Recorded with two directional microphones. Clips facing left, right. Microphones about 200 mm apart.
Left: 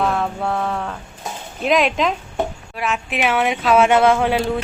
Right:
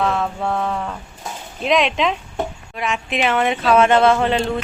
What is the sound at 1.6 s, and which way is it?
A woman's voice, centre (ahead or behind).